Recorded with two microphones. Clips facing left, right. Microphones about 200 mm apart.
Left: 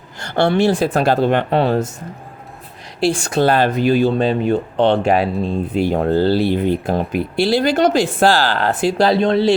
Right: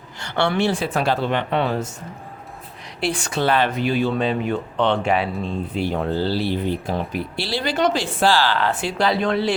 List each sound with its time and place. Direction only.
0.2 s speech: 45° left (ahead or behind)
3.2 s speech: 45° left (ahead or behind); by 9.5 s 30° left (ahead or behind)